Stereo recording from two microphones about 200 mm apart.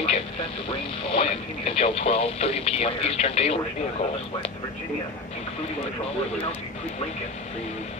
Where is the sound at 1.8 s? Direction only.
30° left (ahead or behind).